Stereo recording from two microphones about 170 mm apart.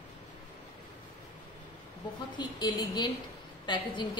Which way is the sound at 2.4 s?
25° left (ahead or behind).